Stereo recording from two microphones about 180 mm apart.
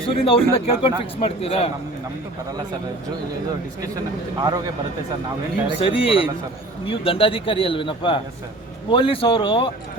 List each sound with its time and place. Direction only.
0.1 s speech: 30° left (ahead or behind)
4.4 s speech: 20° right (ahead or behind)
5.8 s a man's voice: 30° left (ahead or behind)